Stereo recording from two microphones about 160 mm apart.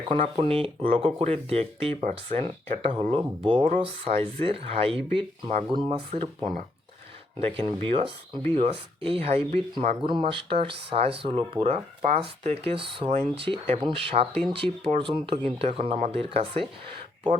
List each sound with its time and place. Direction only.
0.2 s speech: 35° right (ahead or behind)